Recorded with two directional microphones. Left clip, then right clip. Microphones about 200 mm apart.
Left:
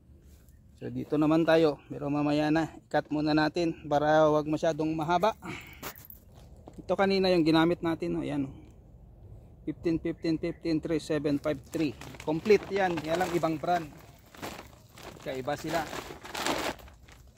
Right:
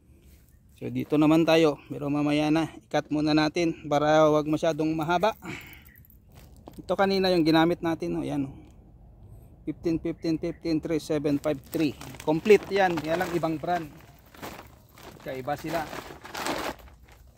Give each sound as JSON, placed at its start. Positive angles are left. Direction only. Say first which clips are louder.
{"t": 1.0, "sound": "a man's voice", "louder": "right 4 dB", "side_deg": -35}
{"t": 6.9, "sound": "a man's voice", "louder": "right 2 dB", "side_deg": -20}
{"t": 9.8, "sound": "speech", "louder": "right 2 dB", "side_deg": -20}
{"t": 13.3, "sound": "a man's voice", "louder": "right 1 dB", "side_deg": -25}
{"t": 14.3, "sound": "walk", "louder": "even", "side_deg": -15}
{"t": 15.6, "sound": "crumpling", "louder": "right 1 dB", "side_deg": -15}